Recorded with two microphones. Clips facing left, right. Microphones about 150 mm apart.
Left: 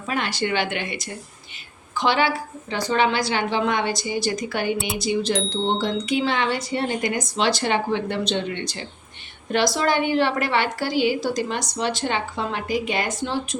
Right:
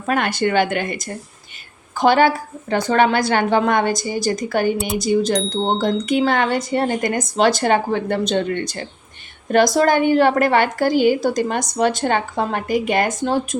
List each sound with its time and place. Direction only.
0.0 s a woman's voice: 55° right (ahead or behind)